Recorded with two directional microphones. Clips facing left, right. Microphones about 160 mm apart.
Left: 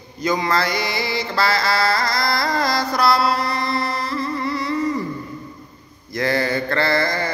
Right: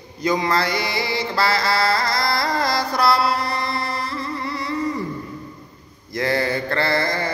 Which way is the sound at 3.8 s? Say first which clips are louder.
Left 3 dB; 25° right (ahead or behind).